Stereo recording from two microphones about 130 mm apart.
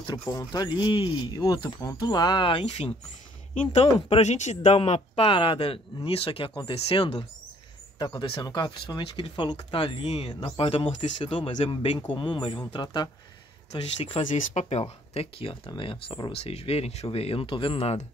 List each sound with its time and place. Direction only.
0.0 s speech: 30° left (ahead or behind)
3.7 s speech: 50° left (ahead or behind)
8.0 s speech: 35° left (ahead or behind)
13.7 s speech: 50° left (ahead or behind)
14.2 s speech: 65° left (ahead or behind)